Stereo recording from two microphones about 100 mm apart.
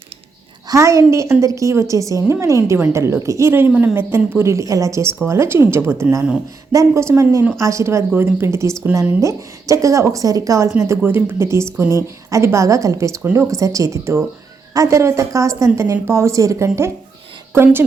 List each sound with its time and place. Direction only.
0.7 s a woman's voice: 30° right (ahead or behind)